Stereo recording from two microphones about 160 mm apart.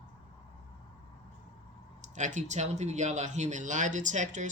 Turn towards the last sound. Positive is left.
turn(degrees=-50)  # may be behind; listen again after turning